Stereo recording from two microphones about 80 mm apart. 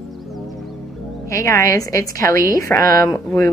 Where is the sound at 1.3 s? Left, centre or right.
Left.